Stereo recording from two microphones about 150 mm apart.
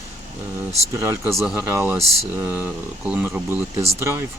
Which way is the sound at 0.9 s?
20° right (ahead or behind).